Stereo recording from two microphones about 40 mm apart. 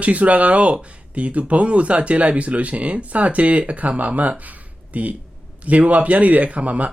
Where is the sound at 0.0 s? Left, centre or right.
Right.